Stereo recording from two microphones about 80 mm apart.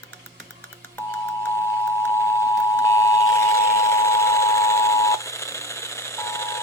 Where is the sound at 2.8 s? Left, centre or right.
Left.